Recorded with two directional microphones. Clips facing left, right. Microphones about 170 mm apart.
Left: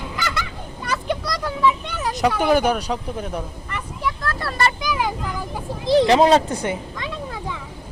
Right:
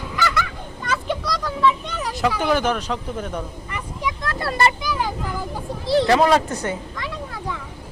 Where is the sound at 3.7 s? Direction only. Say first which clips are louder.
Left 2 dB; 15° right (ahead or behind).